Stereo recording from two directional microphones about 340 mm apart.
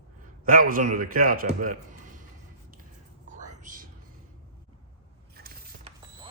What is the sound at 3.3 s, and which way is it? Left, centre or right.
Whispering, right.